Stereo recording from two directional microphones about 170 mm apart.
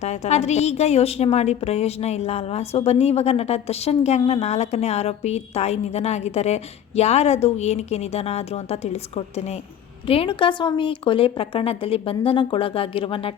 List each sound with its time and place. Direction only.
0.0 s a woman's voice: 40° left (ahead or behind)